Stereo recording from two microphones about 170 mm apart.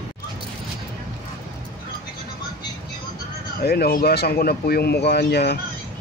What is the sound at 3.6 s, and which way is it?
Speech, 65° left (ahead or behind).